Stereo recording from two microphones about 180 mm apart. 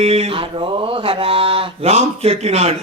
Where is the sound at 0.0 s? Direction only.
35° right (ahead or behind).